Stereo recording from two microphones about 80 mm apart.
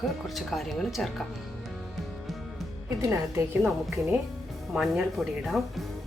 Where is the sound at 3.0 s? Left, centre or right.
Right.